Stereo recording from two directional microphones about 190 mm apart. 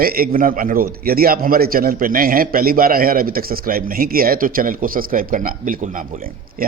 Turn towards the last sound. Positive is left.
turn(degrees=-45)  # may be behind; listen again after turning